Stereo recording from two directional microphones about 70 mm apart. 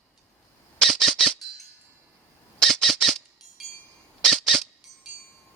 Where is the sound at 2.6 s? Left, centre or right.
Centre.